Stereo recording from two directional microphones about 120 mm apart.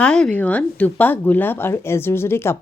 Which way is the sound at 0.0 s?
10° left (ahead or behind).